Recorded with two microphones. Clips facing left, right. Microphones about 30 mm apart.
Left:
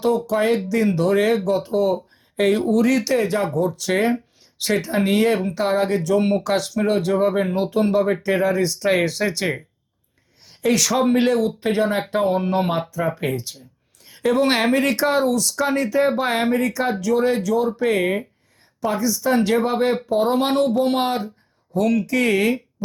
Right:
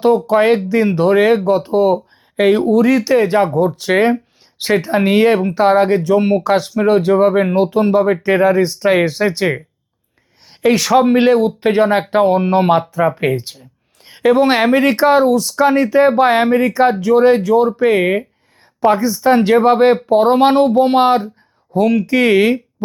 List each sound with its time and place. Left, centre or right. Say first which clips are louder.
0.3 s speech: right 7 dB; right; by 3.2 s centre
3.2 s speech: right 7 dB; right
8.2 s speech: right 7 dB; right
10.7 s speech: right 6 dB; right
13.1 s a sound: right 7 dB; right
14.4 s speech: right 6 dB; centre
22.0 s speech: right 7 dB; right